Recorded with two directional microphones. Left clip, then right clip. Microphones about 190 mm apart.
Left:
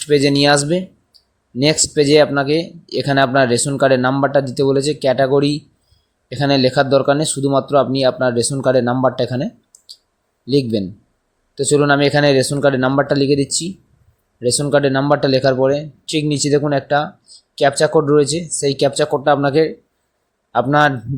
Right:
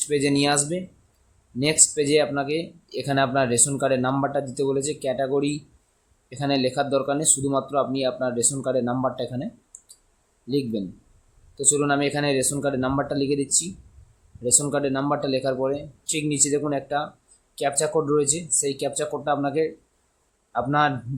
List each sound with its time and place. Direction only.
0.0 s speech: 35° left (ahead or behind)